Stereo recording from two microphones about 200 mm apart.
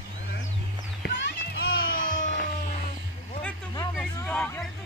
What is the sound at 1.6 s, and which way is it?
Music, 50° left (ahead or behind).